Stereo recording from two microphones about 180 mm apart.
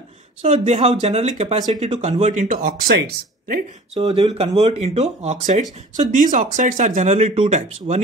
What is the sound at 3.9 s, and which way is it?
A man's voice, 25° right (ahead or behind).